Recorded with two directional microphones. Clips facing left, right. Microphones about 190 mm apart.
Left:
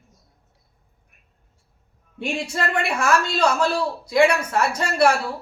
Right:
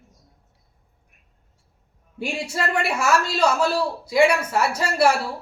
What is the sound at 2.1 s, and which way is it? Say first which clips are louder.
A man's voice: left 1 dB; 5° right (ahead or behind).